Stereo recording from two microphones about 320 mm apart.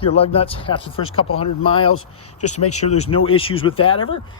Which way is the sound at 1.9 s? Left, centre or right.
Left.